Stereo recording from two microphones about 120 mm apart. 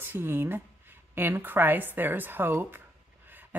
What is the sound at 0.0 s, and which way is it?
Speech, 15° right (ahead or behind).